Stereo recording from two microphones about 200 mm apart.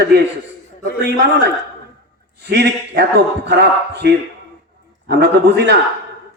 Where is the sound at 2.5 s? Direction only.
55° right (ahead or behind).